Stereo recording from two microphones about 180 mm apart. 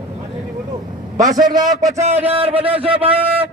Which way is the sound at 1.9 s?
35° right (ahead or behind).